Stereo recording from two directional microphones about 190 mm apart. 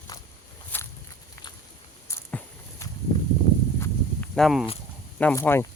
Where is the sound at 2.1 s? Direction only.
15° left (ahead or behind).